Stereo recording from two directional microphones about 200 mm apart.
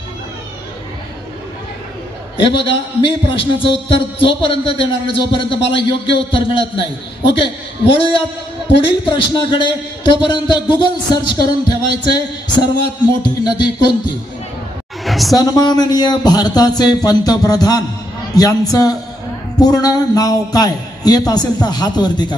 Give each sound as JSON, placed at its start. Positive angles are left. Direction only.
{"t": 2.4, "sound": "a man's voice", "side_deg": 25}
{"t": 15.0, "sound": "a sound", "side_deg": 0}
{"t": 15.3, "sound": "a man's voice", "side_deg": 20}